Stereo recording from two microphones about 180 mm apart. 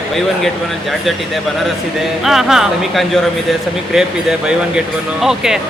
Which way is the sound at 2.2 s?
Centre (ahead or behind).